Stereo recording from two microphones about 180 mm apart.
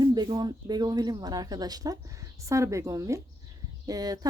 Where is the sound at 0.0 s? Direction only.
25° right (ahead or behind).